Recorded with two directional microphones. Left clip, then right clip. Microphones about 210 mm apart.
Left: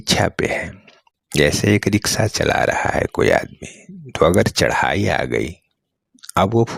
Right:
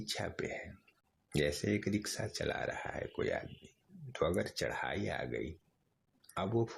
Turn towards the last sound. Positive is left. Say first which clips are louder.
# left 19 dB
turn(degrees=45)  # may be behind; listen again after turning